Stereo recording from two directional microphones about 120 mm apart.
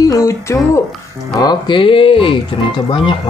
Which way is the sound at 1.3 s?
40° left (ahead or behind).